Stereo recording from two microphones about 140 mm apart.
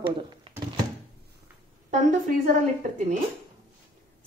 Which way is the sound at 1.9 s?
60° right (ahead or behind).